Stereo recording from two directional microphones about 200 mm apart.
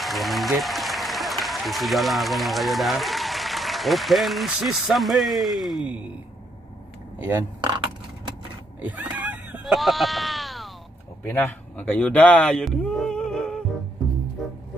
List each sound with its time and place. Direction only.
0.0 s speech: centre (ahead or behind)
7.6 s coin: 25° right (ahead or behind)
8.8 s a sound: 5° right (ahead or behind)
11.3 s speech: 10° left (ahead or behind)